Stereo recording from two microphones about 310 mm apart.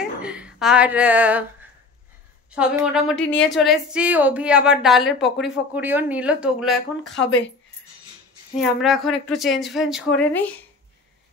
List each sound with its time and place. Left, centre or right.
0.0 s a sound: centre
2.5 s speech: centre
7.2 s speech: left
8.5 s speech: centre